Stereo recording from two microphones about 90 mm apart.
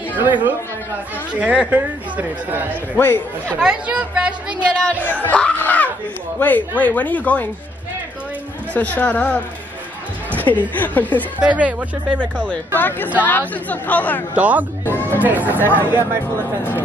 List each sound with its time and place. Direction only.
0.2 s speech: 20° right (ahead or behind)
2.7 s a woman's voice: 20° left (ahead or behind)
3.6 s speech: 10° right (ahead or behind)
5.2 s a woman's voice: 15° left (ahead or behind)
8.7 s speech: 15° left (ahead or behind)
10.4 s a woman's voice: 20° left (ahead or behind)
11.3 s speech: 15° right (ahead or behind)
12.4 s a woman's voice: 20° left (ahead or behind)
14.3 s speech: 15° right (ahead or behind)
14.9 s chatter: 20° left (ahead or behind)
15.2 s speech: 20° right (ahead or behind)